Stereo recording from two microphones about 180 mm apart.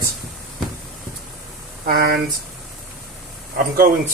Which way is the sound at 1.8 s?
60° right (ahead or behind).